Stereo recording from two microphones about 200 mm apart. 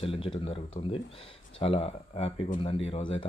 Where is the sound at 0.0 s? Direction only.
30° left (ahead or behind).